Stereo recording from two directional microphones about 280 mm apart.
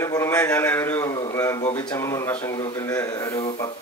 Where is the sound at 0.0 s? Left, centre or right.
Centre.